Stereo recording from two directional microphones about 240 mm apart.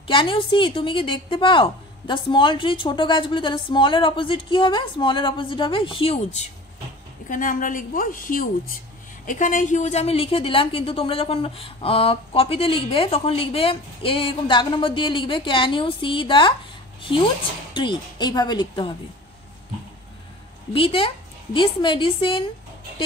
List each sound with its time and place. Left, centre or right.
0.0 s a woman's voice: left
7.2 s a woman's voice: left
17.7 s speech: centre
20.7 s a woman's voice: left